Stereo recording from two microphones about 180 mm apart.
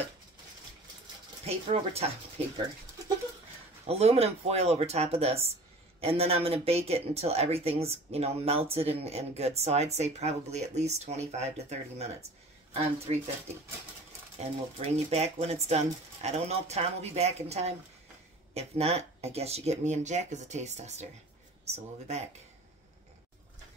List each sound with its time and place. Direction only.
1.4 s speech: 35° right (ahead or behind)
3.8 s speech: 35° right (ahead or behind)
15.0 s speech: 35° right (ahead or behind)